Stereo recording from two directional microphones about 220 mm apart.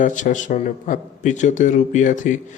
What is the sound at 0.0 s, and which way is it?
A man's voice, 35° left (ahead or behind).